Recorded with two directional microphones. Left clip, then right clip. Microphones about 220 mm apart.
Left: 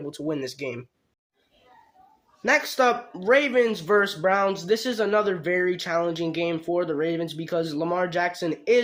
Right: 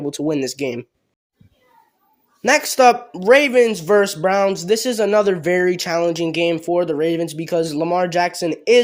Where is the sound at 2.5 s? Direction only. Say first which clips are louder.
Right 8 dB; 40° right (ahead or behind).